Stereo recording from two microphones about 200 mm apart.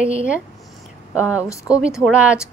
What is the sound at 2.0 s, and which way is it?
Speech, 5° right (ahead or behind).